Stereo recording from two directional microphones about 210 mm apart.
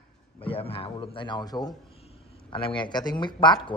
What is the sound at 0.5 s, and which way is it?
A man's voice, 25° left (ahead or behind).